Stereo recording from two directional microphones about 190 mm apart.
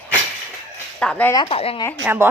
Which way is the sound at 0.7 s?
5° left (ahead or behind).